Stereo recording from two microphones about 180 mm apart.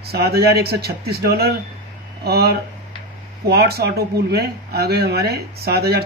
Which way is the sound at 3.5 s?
60° right (ahead or behind).